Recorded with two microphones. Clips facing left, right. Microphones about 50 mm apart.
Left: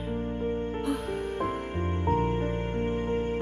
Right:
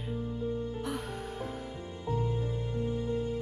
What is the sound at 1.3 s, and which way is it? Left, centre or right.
Music, left.